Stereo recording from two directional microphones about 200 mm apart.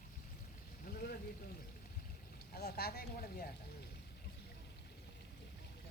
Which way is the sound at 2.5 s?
50° left (ahead or behind).